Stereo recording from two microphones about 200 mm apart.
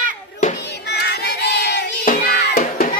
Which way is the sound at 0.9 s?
55° left (ahead or behind).